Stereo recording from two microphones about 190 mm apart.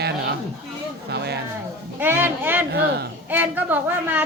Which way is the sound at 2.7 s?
60° right (ahead or behind).